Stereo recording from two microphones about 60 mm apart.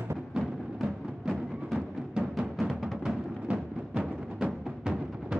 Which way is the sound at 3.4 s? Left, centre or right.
Centre.